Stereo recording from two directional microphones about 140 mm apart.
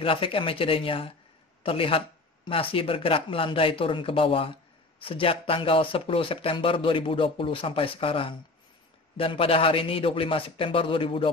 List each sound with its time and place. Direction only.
0.0 s speech: 40° left (ahead or behind)